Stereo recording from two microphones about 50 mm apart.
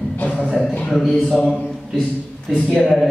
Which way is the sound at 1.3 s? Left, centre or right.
Centre.